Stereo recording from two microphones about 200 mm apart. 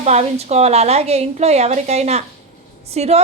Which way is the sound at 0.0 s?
35° right (ahead or behind).